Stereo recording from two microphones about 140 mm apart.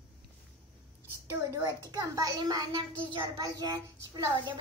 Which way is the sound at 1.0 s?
15° right (ahead or behind).